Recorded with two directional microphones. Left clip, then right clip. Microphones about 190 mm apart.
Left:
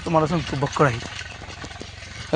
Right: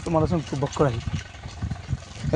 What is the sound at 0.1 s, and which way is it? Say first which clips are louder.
Speech: left 3 dB; 20° left (ahead or behind).